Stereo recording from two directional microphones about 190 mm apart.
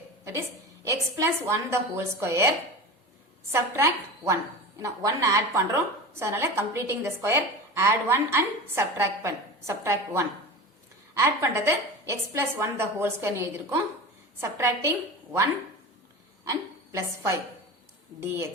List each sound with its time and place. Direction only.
0.3 s a woman's voice: 15° right (ahead or behind)
3.5 s a woman's voice: 15° right (ahead or behind)